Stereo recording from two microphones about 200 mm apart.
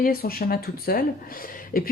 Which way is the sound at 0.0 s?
50° left (ahead or behind).